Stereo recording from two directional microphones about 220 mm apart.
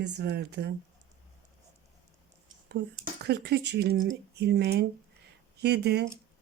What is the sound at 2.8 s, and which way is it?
Speech, 50° right (ahead or behind).